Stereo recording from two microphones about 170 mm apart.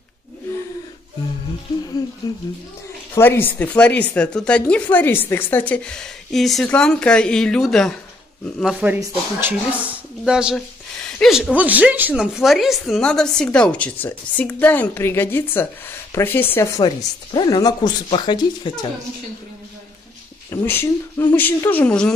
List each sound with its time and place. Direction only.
2.2 s speech: 20° left (ahead or behind); by 7.9 s 5° left (ahead or behind)
8.7 s speech: 10° right (ahead or behind); by 18.9 s 25° left (ahead or behind)
20.4 s speech: 10° left (ahead or behind)